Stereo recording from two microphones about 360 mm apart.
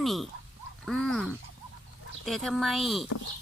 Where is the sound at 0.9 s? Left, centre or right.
Centre.